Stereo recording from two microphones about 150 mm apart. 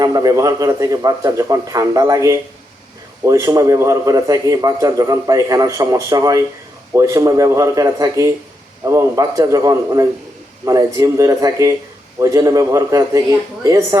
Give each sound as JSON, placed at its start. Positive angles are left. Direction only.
{"t": 0.0, "sound": "a man's voice", "side_deg": -25}